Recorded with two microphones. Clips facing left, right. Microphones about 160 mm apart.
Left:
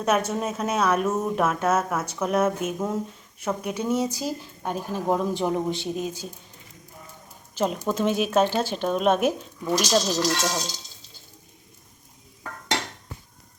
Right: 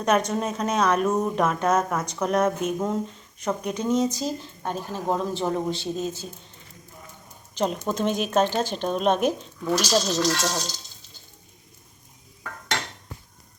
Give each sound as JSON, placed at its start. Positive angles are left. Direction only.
{"t": 0.0, "sound": "a woman's voice", "side_deg": 5}
{"t": 7.5, "sound": "a woman's voice", "side_deg": 5}